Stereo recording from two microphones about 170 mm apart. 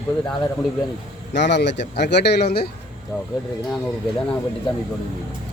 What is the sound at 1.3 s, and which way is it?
Speech, 90° left.